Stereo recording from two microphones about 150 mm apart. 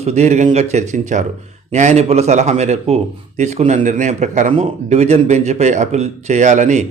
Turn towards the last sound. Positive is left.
turn(degrees=-55)  # may be behind; listen again after turning